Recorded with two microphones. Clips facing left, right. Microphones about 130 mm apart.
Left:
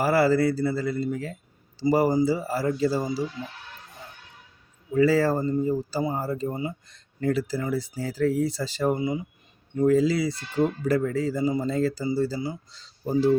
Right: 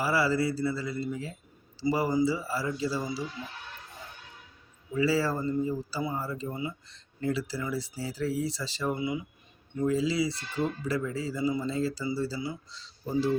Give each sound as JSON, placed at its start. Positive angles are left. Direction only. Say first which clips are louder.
{"t": 0.0, "sound": "speech", "louder": "left 6 dB", "side_deg": 50}
{"t": 4.9, "sound": "speech", "louder": "left 6 dB", "side_deg": 45}